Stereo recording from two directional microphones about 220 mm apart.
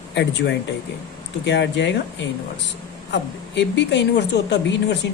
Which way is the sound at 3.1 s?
50° left (ahead or behind).